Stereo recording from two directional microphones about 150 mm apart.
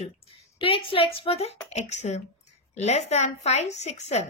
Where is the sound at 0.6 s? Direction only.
35° left (ahead or behind).